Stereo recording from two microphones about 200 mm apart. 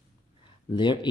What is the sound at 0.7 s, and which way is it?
Speech, 25° left (ahead or behind).